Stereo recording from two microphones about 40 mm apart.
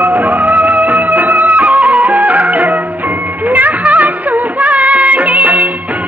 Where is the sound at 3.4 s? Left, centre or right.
Right.